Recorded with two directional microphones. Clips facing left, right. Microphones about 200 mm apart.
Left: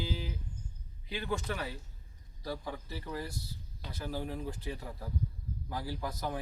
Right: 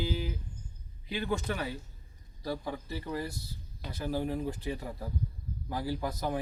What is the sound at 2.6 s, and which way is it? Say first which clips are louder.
A man's voice: right 4 dB; 15° right (ahead or behind).